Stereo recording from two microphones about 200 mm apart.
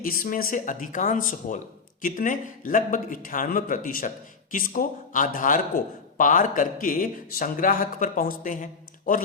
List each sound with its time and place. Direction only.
0.0 s speech: 45° left (ahead or behind)